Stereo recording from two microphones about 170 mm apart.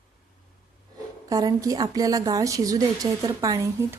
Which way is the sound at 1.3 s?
20° right (ahead or behind).